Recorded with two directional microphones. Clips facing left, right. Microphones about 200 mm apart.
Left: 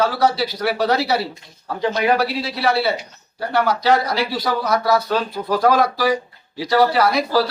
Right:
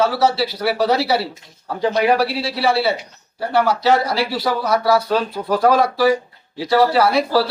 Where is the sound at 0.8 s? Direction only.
30° right (ahead or behind).